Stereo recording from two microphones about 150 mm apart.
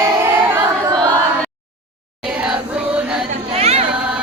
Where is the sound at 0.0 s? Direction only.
15° right (ahead or behind).